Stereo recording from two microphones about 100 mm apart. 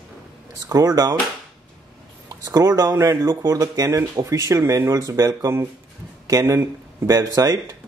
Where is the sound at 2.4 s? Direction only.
40° right (ahead or behind).